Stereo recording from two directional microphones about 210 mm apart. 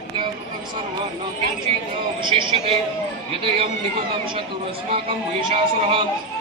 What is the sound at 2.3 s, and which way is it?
Speech, 25° right (ahead or behind).